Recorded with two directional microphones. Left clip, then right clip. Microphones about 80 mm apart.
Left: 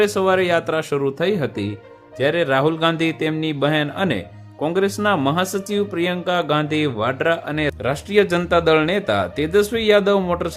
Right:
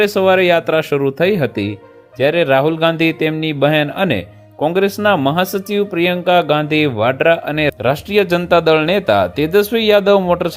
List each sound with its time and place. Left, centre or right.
0.0 s speech: right